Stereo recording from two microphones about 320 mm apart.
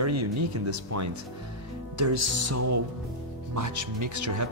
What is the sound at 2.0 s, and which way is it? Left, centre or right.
Music, right.